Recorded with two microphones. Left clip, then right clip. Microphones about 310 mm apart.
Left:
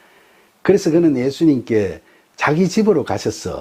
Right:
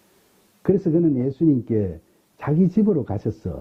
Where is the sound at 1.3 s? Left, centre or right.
Centre.